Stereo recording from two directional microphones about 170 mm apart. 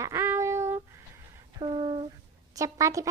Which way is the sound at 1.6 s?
30° right (ahead or behind).